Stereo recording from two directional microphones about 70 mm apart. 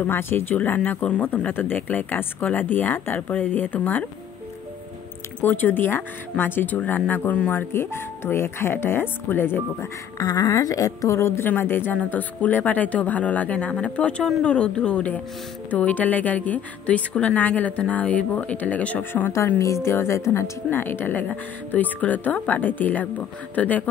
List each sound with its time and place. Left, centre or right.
0.0 s speech: left
0.6 s a woman's voice: left
5.4 s a woman's voice: left
7.7 s speech: left
10.1 s a woman's voice: left
19.6 s a woman's voice: left